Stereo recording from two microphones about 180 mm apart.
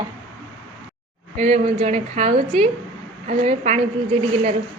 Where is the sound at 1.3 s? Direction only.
40° right (ahead or behind).